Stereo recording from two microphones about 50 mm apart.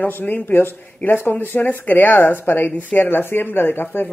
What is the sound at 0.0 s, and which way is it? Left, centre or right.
Speech, left.